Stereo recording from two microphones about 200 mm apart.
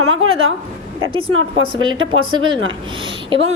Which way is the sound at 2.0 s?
80° right.